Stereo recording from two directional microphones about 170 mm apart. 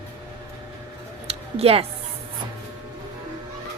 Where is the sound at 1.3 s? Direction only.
35° right (ahead or behind).